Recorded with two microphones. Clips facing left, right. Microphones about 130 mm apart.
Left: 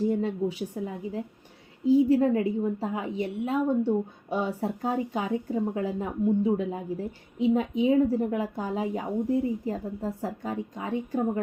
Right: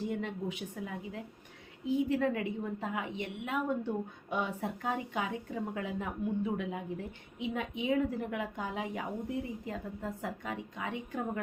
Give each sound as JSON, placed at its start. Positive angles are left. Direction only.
{"t": 0.1, "sound": "a woman's voice", "side_deg": 35}